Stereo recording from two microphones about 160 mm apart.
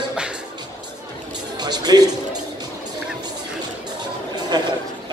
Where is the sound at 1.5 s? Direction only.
25° right (ahead or behind).